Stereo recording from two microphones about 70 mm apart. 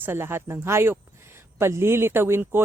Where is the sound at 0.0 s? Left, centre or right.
Right.